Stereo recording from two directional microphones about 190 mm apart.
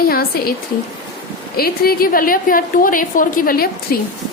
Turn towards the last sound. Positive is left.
turn(degrees=50)  # may be behind; listen again after turning